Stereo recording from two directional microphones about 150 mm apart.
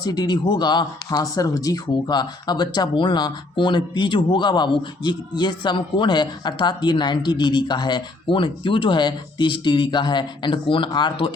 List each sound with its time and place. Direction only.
0.0 s speech: 25° left (ahead or behind)